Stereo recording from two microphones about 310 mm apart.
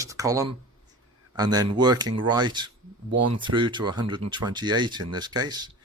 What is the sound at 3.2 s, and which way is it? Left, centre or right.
Speech, right.